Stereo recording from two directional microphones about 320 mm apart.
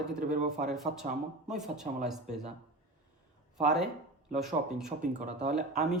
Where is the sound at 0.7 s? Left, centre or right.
Centre.